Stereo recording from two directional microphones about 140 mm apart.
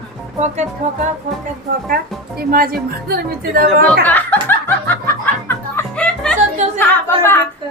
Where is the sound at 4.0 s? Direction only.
10° left (ahead or behind).